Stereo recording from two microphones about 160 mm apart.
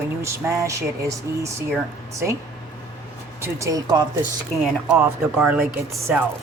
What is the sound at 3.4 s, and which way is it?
Speech, 15° right (ahead or behind).